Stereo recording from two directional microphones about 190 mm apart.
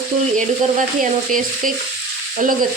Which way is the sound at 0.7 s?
45° right (ahead or behind).